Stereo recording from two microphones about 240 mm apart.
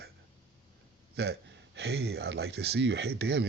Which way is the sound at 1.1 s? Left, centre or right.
Right.